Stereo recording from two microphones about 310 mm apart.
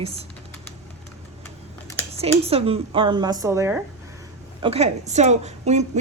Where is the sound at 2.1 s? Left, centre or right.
Centre.